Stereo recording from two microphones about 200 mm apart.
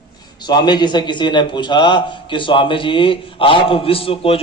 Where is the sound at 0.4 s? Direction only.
20° left (ahead or behind).